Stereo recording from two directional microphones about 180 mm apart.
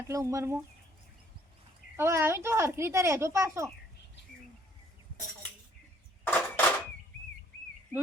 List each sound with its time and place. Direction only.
0.1 s speech: 15° right (ahead or behind)
2.0 s speech: 15° right (ahead or behind)
6.2 s a sound: 10° left (ahead or behind)